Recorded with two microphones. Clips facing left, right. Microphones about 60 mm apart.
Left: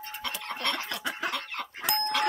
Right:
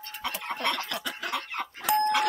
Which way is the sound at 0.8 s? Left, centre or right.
Left.